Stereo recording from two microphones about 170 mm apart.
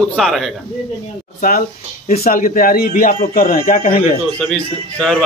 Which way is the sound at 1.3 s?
55° left (ahead or behind).